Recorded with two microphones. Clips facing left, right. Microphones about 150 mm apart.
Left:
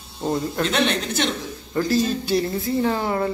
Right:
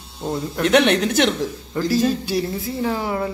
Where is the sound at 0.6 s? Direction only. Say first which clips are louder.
Right 9 dB; 70° right (ahead or behind).